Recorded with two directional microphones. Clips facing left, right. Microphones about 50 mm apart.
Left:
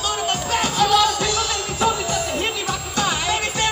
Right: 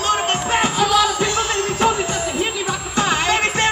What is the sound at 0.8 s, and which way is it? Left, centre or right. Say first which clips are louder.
Music: left 2 dB; centre.